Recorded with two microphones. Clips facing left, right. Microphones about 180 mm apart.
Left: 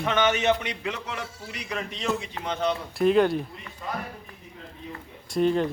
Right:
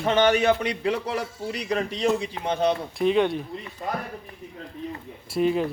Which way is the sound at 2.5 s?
15° right (ahead or behind).